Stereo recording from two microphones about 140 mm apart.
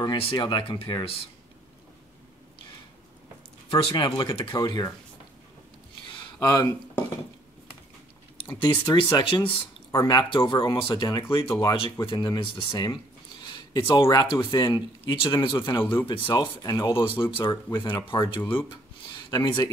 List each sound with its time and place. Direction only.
0.0 s speech: 35° left (ahead or behind)
3.7 s speech: 35° left (ahead or behind)
4.6 s speech: 25° left (ahead or behind)
6.1 s a sound: 30° left (ahead or behind)
8.5 s speech: 35° left (ahead or behind)